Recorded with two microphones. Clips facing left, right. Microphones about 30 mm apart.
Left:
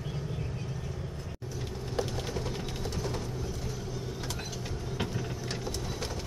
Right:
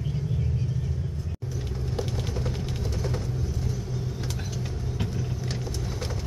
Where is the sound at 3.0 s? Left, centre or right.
Centre.